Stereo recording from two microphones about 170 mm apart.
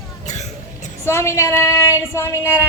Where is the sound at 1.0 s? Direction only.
15° left (ahead or behind).